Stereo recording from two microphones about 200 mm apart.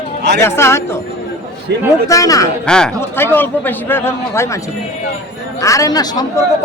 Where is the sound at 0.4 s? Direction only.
15° left (ahead or behind).